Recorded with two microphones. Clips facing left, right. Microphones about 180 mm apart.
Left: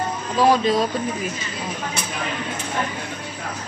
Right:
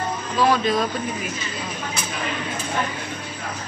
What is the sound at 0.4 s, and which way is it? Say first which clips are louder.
Speech: left 2 dB; 35° left (ahead or behind).